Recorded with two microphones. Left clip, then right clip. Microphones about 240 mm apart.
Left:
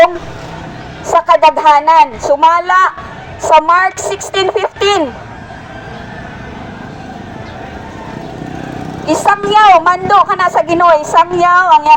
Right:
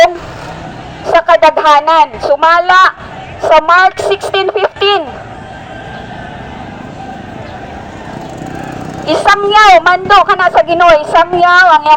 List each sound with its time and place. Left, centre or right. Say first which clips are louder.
1.0 s a woman's voice: right 1 dB; right
9.1 s a woman's voice: right 2 dB; right